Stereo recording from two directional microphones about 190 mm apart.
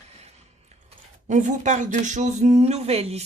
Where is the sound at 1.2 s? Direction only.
40° right (ahead or behind).